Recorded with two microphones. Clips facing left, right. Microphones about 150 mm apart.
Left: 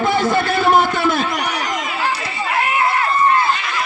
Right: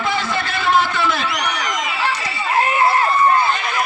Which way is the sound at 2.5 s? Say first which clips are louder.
Right 2 dB; 35° right (ahead or behind).